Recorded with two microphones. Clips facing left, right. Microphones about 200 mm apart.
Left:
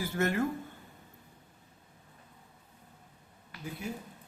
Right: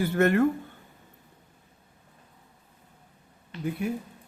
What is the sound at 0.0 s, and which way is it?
Speech, 60° right (ahead or behind).